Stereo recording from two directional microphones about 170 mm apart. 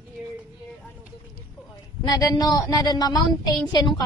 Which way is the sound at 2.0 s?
20° left (ahead or behind).